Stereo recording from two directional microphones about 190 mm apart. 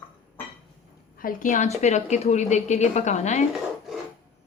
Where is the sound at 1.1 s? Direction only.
45° left (ahead or behind).